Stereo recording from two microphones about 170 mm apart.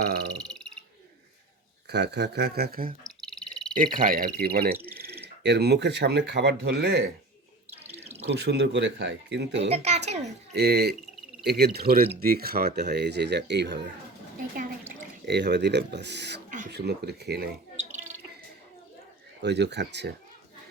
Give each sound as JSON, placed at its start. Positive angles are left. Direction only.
{"t": 0.3, "sound": "frog", "side_deg": 5}
{"t": 1.9, "sound": "speech", "side_deg": -80}
{"t": 3.2, "sound": "frog", "side_deg": 0}
{"t": 3.8, "sound": "speech", "side_deg": -50}
{"t": 4.4, "sound": "speech", "side_deg": -65}
{"t": 5.4, "sound": "speech", "side_deg": -80}
{"t": 8.3, "sound": "speech", "side_deg": -90}
{"t": 9.6, "sound": "a woman's voice", "side_deg": -40}
{"t": 10.5, "sound": "speech", "side_deg": -70}
{"t": 14.3, "sound": "a sound", "side_deg": -50}
{"t": 15.3, "sound": "speech", "side_deg": -85}
{"t": 16.7, "sound": "speech", "side_deg": -75}
{"t": 19.4, "sound": "speech", "side_deg": -90}